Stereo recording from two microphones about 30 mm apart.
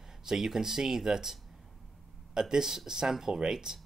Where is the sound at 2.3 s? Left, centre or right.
Centre.